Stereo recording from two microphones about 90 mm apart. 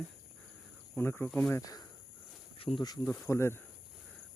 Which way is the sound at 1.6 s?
45° left (ahead or behind).